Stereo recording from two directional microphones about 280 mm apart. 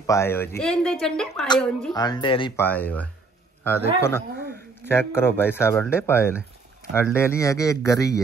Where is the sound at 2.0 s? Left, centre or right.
Centre.